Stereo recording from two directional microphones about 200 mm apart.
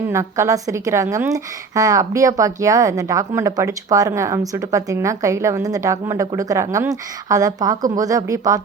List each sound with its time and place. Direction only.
0.1 s a woman's voice: 15° right (ahead or behind)